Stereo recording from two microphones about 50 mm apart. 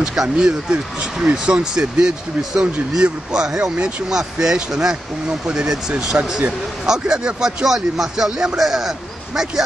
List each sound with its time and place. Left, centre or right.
0.0 s speech: centre